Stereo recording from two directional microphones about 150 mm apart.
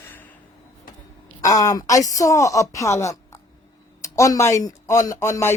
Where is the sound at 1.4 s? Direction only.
25° left (ahead or behind).